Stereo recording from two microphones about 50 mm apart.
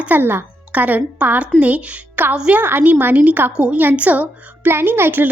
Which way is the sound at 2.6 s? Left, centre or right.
Right.